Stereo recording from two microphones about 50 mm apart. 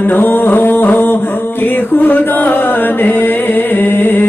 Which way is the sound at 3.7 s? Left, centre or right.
Left.